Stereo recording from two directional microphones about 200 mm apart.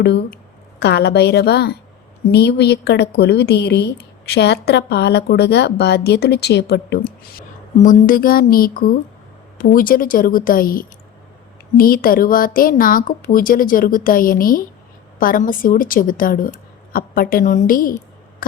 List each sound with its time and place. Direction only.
0.0 s a woman's voice: 55° left (ahead or behind)